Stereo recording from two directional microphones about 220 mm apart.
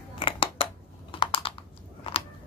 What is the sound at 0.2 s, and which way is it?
Scissors, 25° left (ahead or behind).